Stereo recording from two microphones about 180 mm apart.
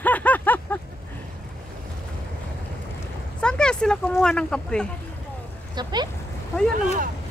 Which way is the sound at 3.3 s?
5° left (ahead or behind).